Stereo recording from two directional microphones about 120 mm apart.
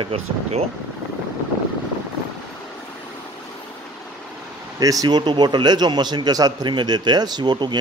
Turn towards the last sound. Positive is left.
turn(degrees=-40)  # may be behind; listen again after turning